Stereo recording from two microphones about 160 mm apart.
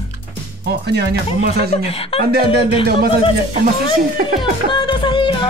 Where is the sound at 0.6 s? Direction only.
90° right.